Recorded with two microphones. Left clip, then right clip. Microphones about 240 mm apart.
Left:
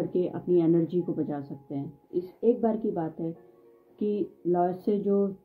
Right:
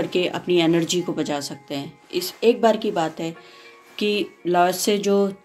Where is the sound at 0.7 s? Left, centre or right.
Right.